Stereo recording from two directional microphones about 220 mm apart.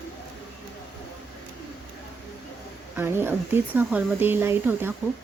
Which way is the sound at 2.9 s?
10° right (ahead or behind).